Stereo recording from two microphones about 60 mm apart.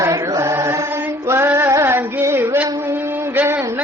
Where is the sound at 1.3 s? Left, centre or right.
Right.